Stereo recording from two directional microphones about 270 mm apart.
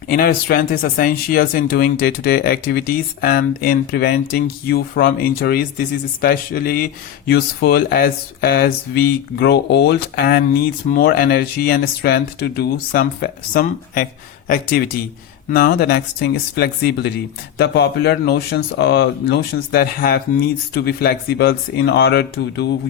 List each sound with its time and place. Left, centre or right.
0.1 s speech: left